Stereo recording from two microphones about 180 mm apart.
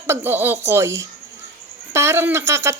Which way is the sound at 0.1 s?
10° right (ahead or behind).